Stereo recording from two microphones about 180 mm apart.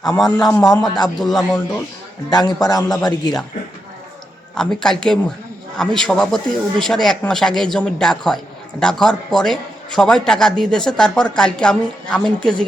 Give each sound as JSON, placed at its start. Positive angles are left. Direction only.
{"t": 0.2, "sound": "a man's voice", "side_deg": 5}
{"t": 0.6, "sound": "a man's voice", "side_deg": 20}
{"t": 1.2, "sound": "a man's voice", "side_deg": 0}
{"t": 2.3, "sound": "a man's voice", "side_deg": 25}
{"t": 4.5, "sound": "a man's voice", "side_deg": 5}